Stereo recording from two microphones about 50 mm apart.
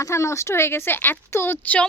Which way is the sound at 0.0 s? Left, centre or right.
Left.